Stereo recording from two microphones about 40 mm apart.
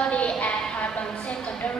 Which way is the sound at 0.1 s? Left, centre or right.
Left.